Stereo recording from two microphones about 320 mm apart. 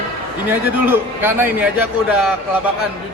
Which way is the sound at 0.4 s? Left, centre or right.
Centre.